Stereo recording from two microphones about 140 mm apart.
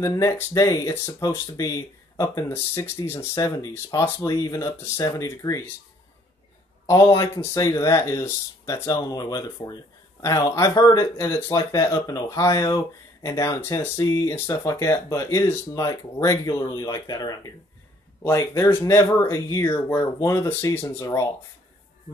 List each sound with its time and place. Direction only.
0.0 s speech: 25° left (ahead or behind)
6.9 s speech: 25° left (ahead or behind)